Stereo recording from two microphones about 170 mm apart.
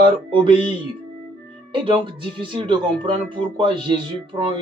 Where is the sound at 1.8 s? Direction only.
30° right (ahead or behind).